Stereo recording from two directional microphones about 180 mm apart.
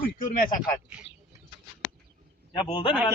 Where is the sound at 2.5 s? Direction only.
25° left (ahead or behind).